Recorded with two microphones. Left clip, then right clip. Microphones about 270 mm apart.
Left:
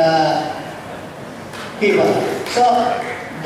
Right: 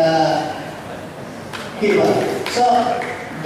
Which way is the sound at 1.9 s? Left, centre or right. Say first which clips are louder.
Right 2 dB; centre.